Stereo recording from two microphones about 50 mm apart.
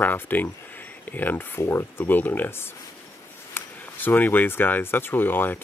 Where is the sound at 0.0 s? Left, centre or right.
Left.